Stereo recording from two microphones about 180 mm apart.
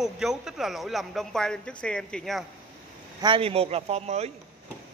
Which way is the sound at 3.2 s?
30° right (ahead or behind).